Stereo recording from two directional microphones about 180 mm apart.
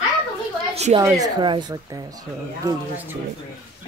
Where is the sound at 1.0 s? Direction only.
20° right (ahead or behind).